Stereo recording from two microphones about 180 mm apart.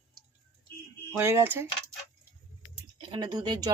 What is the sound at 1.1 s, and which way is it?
Speech, 15° right (ahead or behind).